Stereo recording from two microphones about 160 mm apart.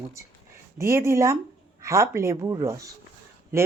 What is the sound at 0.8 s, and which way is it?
Speech, 15° right (ahead or behind).